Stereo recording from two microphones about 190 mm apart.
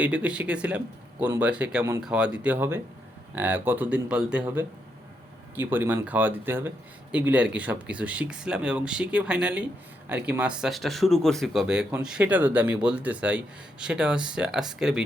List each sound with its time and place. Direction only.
0.0 s speech: 5° right (ahead or behind)